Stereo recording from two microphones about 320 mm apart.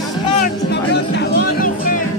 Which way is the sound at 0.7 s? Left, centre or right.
Left.